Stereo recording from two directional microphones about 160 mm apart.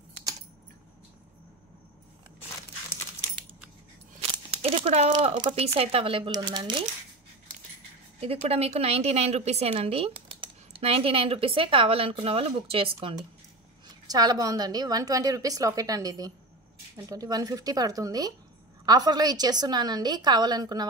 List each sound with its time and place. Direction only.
4.2 s a sound: 35° right (ahead or behind)
5.1 s a woman's voice: 30° right (ahead or behind)
8.5 s speech: 40° right (ahead or behind)
14.0 s a woman's voice: 25° right (ahead or behind)